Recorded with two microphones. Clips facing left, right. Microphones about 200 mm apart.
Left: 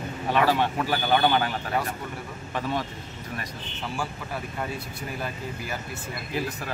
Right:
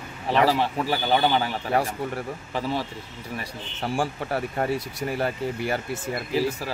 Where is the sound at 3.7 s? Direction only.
45° right (ahead or behind).